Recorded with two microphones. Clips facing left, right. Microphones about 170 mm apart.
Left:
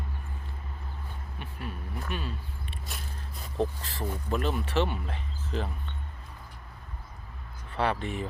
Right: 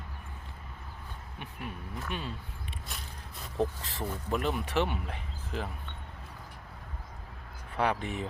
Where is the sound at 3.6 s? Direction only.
20° left (ahead or behind).